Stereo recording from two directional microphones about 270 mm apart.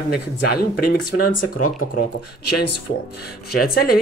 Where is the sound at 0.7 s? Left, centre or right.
Left.